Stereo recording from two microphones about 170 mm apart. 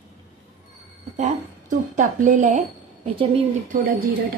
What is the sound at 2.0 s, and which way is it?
A woman's voice, 45° right (ahead or behind).